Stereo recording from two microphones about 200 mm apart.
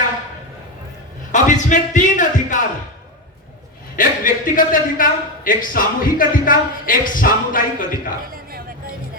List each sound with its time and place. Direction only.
1.3 s speech: 40° left (ahead or behind)
3.9 s a man's voice: 45° left (ahead or behind)